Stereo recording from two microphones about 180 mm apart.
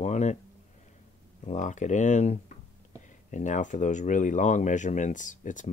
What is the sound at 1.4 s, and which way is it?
Speech, 40° left (ahead or behind).